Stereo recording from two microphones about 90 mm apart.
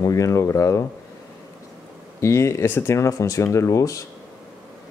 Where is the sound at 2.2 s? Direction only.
30° left (ahead or behind).